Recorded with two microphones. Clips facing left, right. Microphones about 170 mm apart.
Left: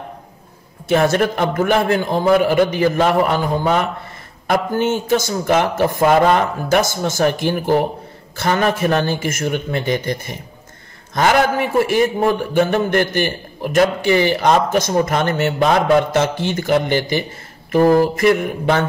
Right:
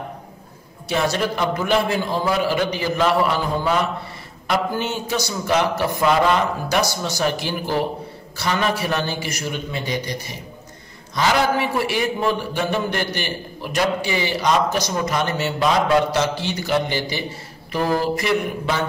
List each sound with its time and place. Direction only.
0.8 s a man's voice: 50° left (ahead or behind)
4.5 s a man's voice: 50° left (ahead or behind)